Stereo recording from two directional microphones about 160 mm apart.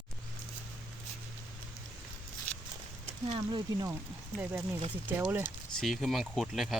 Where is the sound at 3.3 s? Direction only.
30° right (ahead or behind).